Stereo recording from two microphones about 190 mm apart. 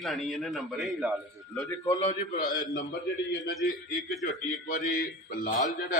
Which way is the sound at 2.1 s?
45° left (ahead or behind).